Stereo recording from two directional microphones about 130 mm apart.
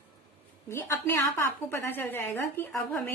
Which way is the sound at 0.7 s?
20° left (ahead or behind).